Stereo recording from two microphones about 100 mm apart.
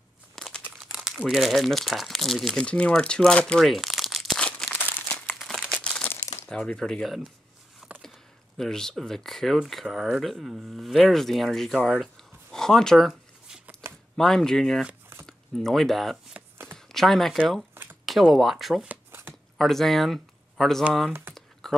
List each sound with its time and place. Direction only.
0.4 s crumpling: 5° left (ahead or behind)
1.1 s speech: centre (ahead or behind)
4.7 s crumpling: 15° left (ahead or behind)
6.0 s crumpling: 30° left (ahead or behind)
6.5 s speech: 5° left (ahead or behind)
7.9 s a sound: 15° right (ahead or behind)
8.5 s speech: 5° left (ahead or behind)
16.7 s a sound: 5° left (ahead or behind)
18.0 s speech: centre (ahead or behind)
18.9 s shuffling cards: 20° right (ahead or behind)
19.6 s speech: centre (ahead or behind)
21.1 s speech: 20° right (ahead or behind)
21.4 s a sound: 5° left (ahead or behind)